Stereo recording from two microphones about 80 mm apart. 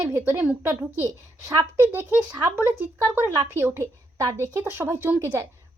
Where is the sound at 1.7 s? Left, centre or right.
Right.